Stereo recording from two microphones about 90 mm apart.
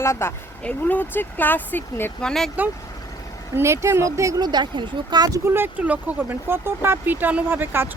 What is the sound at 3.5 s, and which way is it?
Speech, 30° right (ahead or behind).